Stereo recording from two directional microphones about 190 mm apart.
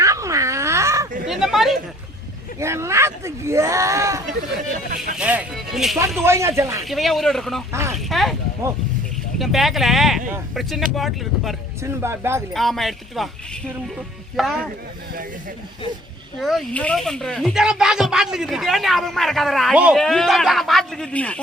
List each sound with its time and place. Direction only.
0.0 s baby cry: 15° right (ahead or behind)
1.3 s a sound: centre (ahead or behind)
2.6 s speech: 15° right (ahead or behind)
6.1 s speech: 15° right (ahead or behind)
6.8 s speech: centre (ahead or behind)
7.7 s speech: 15° right (ahead or behind)
7.9 s speech: centre (ahead or behind)
9.4 s speech: centre (ahead or behind)
11.8 s speech: 15° right (ahead or behind)
12.5 s speech: centre (ahead or behind)
16.4 s speech: centre (ahead or behind)